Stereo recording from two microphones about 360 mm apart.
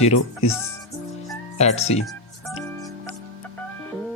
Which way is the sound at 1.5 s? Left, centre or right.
Centre.